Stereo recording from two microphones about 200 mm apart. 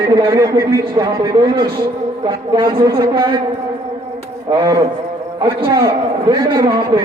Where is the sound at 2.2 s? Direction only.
20° right (ahead or behind).